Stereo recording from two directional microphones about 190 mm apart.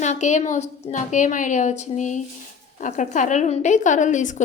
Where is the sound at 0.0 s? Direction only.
40° left (ahead or behind).